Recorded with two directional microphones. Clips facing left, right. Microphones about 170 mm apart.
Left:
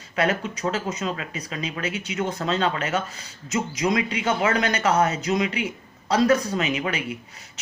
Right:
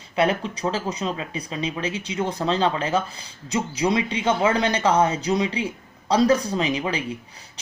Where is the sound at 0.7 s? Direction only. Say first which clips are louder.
Even; 30° right (ahead or behind).